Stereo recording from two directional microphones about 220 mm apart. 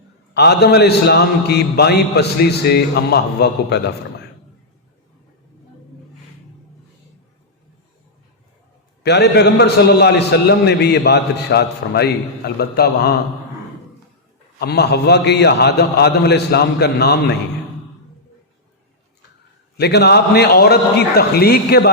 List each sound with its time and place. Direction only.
0.3 s a man's voice: 50° left (ahead or behind)
9.0 s a man's voice: 50° left (ahead or behind)
14.6 s a man's voice: 45° left (ahead or behind)
19.7 s a man's voice: 50° left (ahead or behind)